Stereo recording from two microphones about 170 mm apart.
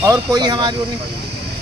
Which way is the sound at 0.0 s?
20° right (ahead or behind).